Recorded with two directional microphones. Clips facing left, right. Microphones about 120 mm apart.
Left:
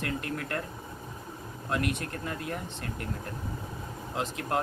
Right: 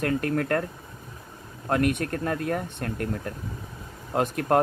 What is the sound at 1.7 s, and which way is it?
Speech, 55° right (ahead or behind).